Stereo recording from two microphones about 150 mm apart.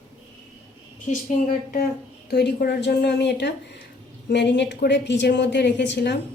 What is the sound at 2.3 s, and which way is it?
A woman's voice, 90° left.